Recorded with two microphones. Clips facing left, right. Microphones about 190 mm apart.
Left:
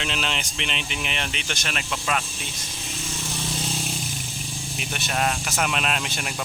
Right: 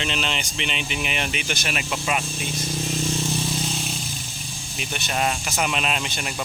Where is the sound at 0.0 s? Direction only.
Centre (ahead or behind).